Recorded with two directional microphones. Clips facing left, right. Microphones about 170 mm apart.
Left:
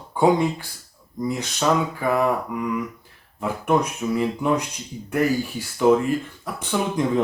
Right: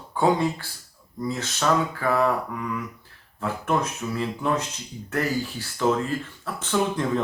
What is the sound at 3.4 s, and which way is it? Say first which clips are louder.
Speech: left 4 dB; 15° left (ahead or behind).